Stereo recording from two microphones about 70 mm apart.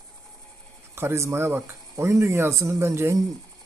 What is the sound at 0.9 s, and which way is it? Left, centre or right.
Speech, right.